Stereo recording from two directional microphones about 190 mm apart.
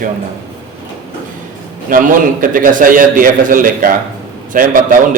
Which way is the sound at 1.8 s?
45° right (ahead or behind).